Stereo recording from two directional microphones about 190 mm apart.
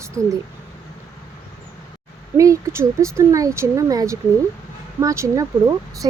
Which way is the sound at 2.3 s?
15° right (ahead or behind).